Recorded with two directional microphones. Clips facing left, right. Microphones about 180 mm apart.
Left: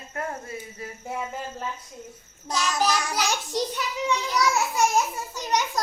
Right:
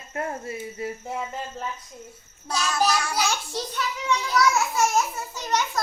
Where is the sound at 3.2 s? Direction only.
15° left (ahead or behind).